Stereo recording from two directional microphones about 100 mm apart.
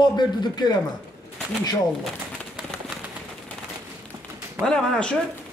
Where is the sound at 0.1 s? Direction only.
45° left (ahead or behind).